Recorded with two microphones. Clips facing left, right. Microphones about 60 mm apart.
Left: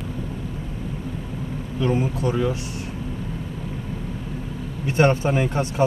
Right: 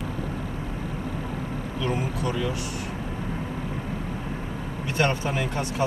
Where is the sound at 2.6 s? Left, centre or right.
Right.